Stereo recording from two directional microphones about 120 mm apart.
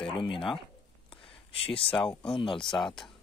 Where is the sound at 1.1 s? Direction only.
50° left (ahead or behind).